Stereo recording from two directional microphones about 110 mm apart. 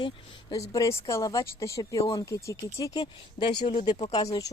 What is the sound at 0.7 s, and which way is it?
Speech, 30° left (ahead or behind).